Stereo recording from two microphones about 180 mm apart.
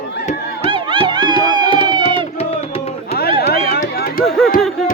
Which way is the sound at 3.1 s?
60° left (ahead or behind).